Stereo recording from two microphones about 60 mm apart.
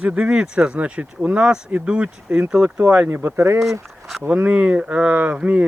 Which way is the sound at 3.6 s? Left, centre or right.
Centre.